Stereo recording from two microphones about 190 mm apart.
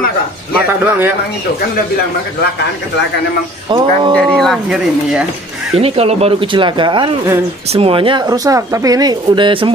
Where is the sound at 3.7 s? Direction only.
25° right (ahead or behind).